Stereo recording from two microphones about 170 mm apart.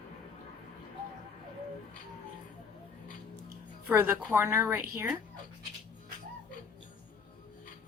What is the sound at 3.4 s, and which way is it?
Speech, 15° right (ahead or behind).